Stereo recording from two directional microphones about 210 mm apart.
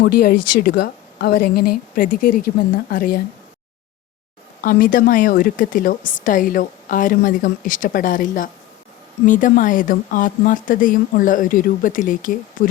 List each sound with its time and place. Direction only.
0.0 s a woman's voice: 45° left (ahead or behind)
4.6 s a woman's voice: 40° left (ahead or behind)